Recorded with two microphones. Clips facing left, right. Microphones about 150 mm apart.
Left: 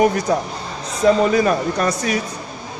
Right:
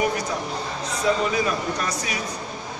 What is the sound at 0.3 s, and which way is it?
Speech, 50° left (ahead or behind).